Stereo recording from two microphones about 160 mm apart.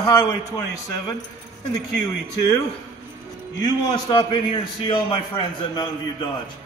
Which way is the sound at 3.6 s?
25° left (ahead or behind).